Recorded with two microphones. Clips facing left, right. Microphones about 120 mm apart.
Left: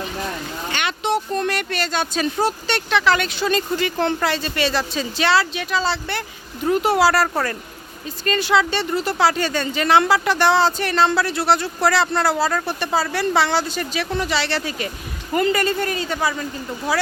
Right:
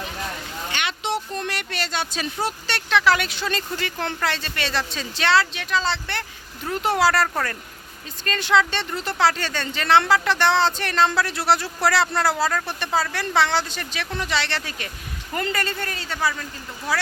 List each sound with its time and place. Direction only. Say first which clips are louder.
0.7 s a sound: left 5 dB; 45° left (ahead or behind)
2.9 s speech: even; 5° right (ahead or behind)
3.4 s speech: left 7 dB; 15° left (ahead or behind)